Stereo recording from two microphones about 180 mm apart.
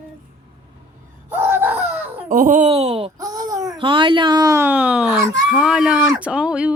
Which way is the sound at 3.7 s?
30° right (ahead or behind).